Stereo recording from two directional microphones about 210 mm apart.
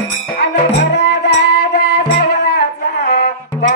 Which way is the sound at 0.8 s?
55° left (ahead or behind).